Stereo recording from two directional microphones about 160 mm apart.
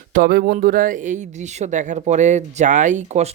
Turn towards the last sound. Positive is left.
turn(degrees=-45)  # may be behind; listen again after turning